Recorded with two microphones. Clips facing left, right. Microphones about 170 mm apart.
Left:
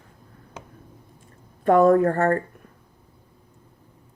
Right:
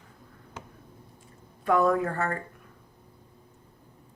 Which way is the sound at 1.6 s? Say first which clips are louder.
Left 8 dB; 45° left (ahead or behind).